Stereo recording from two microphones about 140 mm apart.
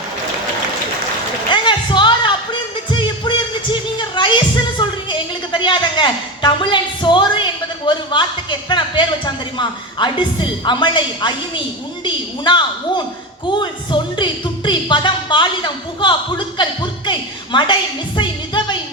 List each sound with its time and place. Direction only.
1.5 s music: 35° left (ahead or behind)
12.0 s speech: 30° left (ahead or behind)
18.2 s music: 35° left (ahead or behind)